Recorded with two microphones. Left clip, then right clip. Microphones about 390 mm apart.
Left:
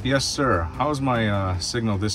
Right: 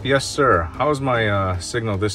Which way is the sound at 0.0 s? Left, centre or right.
Centre.